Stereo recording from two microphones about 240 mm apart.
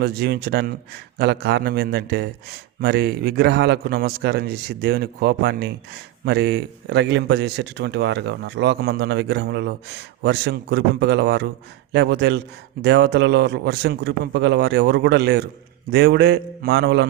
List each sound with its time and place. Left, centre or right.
0.0 s a man's voice: right